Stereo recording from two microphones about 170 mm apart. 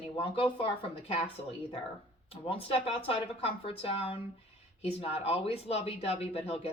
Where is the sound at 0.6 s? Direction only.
35° left (ahead or behind).